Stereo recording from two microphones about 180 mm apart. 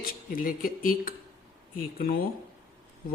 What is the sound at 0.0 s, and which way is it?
A man's voice, 50° left (ahead or behind).